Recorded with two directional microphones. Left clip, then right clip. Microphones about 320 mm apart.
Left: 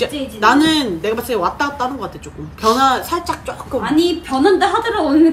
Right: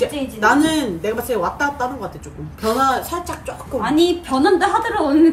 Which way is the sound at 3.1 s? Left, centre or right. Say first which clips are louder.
Left 5 dB; left.